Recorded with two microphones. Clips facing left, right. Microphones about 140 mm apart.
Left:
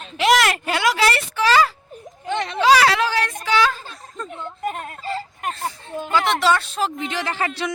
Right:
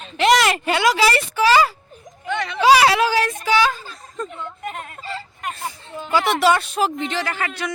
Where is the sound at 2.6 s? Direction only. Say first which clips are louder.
Right 2 dB; 10° right (ahead or behind).